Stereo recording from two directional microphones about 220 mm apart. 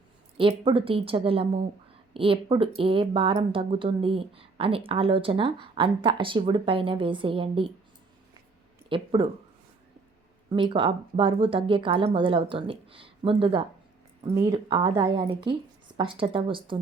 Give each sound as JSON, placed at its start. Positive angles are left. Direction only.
{"t": 0.3, "sound": "speech", "side_deg": -25}
{"t": 8.9, "sound": "speech", "side_deg": -25}
{"t": 10.5, "sound": "speech", "side_deg": -25}